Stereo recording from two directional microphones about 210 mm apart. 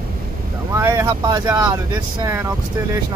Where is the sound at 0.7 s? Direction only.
10° right (ahead or behind).